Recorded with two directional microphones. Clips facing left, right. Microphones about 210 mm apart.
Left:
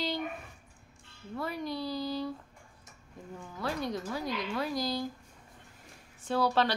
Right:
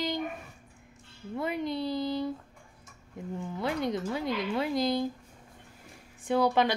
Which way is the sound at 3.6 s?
20° right (ahead or behind).